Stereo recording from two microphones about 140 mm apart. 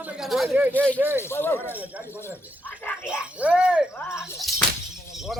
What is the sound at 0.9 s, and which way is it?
Speech, 15° right (ahead or behind).